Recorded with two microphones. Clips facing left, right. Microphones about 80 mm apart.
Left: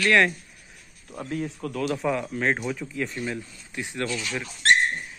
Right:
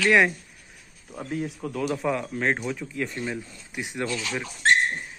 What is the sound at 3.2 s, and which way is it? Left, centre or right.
Speech, centre.